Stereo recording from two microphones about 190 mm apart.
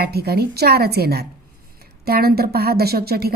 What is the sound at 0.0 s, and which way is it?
A woman's voice, 55° right (ahead or behind).